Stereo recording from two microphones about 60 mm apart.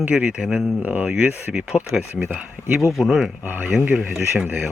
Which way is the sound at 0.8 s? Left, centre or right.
Right.